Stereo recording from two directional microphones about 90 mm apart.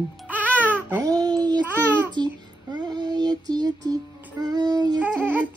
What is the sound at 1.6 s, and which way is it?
Babbling, 20° right (ahead or behind).